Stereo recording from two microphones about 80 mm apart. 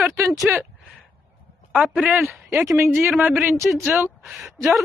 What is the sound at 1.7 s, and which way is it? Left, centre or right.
Speech, centre.